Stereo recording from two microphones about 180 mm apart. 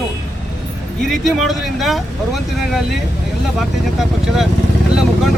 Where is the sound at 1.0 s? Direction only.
Centre (ahead or behind).